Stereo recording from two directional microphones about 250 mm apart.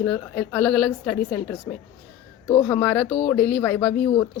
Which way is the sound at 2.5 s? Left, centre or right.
Centre.